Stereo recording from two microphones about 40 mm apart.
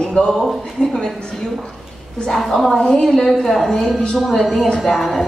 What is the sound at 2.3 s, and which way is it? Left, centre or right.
A woman's voice, centre.